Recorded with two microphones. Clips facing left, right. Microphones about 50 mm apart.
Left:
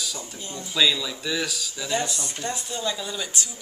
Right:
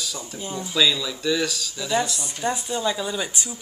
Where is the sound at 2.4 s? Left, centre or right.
Centre.